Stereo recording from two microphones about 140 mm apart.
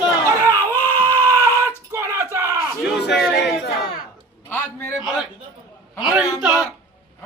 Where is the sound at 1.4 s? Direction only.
25° right (ahead or behind).